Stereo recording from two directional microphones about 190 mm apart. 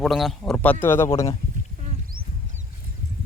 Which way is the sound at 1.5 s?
45° right (ahead or behind).